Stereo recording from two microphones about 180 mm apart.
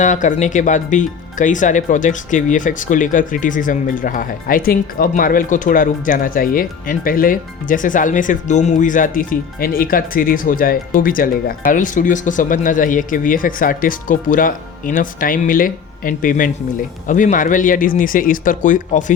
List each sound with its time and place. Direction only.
0.0 s speech: 45° left (ahead or behind)